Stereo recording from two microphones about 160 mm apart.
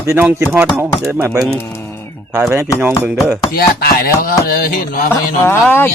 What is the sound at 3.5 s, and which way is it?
Chopping, 70° left (ahead or behind).